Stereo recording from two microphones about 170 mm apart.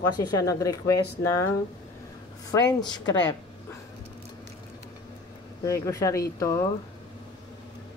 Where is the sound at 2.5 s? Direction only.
20° left (ahead or behind).